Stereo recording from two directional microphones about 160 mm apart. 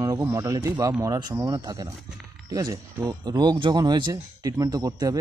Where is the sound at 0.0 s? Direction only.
20° right (ahead or behind).